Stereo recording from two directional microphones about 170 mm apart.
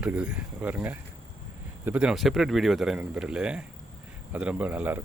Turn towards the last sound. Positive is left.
turn(degrees=-10)  # may be behind; listen again after turning